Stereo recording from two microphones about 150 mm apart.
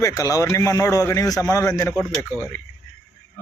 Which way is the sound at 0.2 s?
25° left (ahead or behind).